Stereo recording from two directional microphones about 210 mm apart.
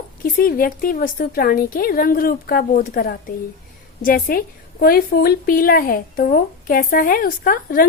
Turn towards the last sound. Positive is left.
turn(degrees=45)  # may be behind; listen again after turning